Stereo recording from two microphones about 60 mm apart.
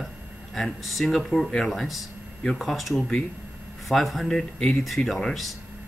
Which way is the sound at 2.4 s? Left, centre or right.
Centre.